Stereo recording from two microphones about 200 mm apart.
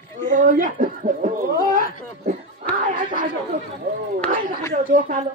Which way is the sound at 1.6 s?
45° right (ahead or behind).